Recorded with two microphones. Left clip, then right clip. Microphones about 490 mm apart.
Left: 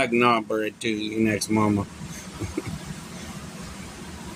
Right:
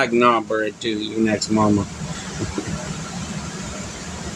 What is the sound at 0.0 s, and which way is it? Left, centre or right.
Speech, left.